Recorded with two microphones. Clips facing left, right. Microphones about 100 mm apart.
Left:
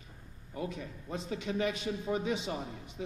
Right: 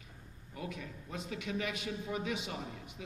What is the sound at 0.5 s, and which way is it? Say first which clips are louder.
A man's voice: left 4 dB; 30° left (ahead or behind).